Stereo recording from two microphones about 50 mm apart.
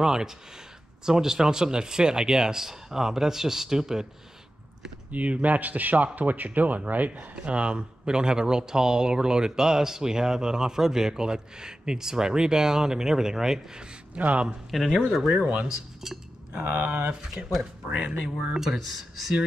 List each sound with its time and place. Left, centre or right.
0.0 s speech: centre
5.1 s a man's voice: right; by 13.8 s centre
14.1 s speech: right
14.7 s speech: centre
15.2 s speech: centre
16.0 s a sound: centre
17.4 s speech: right
18.5 s speech: centre